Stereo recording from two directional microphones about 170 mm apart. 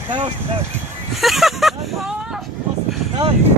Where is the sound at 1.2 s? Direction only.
Centre (ahead or behind).